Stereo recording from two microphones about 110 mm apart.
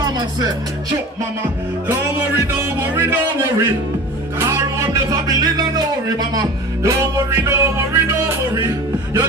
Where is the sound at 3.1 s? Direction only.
20° right (ahead or behind).